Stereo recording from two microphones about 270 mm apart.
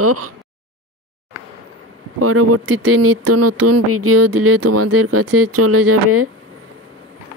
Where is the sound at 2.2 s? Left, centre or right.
Right.